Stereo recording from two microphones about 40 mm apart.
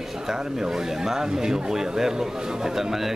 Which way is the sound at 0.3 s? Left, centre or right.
Centre.